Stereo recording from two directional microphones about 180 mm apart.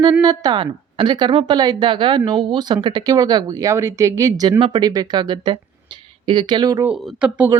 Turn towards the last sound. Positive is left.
turn(degrees=-5)  # may be behind; listen again after turning